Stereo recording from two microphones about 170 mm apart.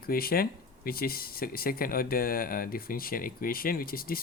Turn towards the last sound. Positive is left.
turn(degrees=60)  # may be behind; listen again after turning